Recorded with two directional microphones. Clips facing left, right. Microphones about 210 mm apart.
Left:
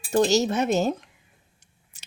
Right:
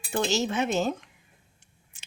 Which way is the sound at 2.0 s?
40° left (ahead or behind).